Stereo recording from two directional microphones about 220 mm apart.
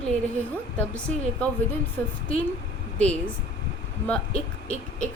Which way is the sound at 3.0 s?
5° left (ahead or behind).